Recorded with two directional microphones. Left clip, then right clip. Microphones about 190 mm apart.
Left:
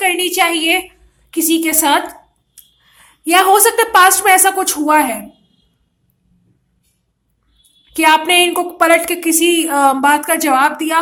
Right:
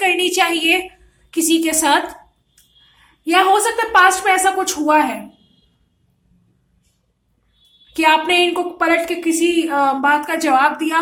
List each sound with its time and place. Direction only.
0.0 s a woman's voice: 15° left (ahead or behind)
7.9 s a woman's voice: 20° left (ahead or behind)